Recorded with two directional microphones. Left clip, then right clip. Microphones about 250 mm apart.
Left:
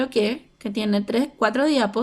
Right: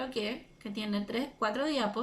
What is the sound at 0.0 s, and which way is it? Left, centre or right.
A woman's voice, left.